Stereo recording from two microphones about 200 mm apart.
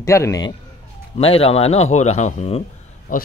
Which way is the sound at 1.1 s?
30° left (ahead or behind).